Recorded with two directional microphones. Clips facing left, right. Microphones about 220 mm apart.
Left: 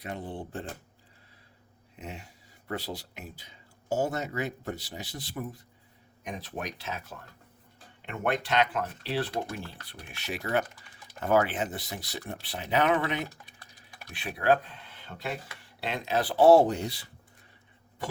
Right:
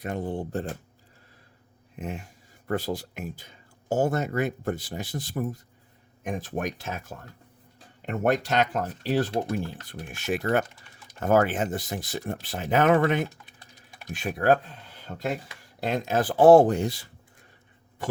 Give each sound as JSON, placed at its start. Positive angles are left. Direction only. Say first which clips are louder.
{"t": 0.0, "sound": "speech", "louder": "right 7 dB", "side_deg": -45}
{"t": 2.0, "sound": "speech", "louder": "right 7 dB", "side_deg": -50}